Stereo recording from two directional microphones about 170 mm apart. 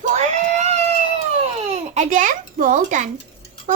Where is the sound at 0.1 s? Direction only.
40° right (ahead or behind).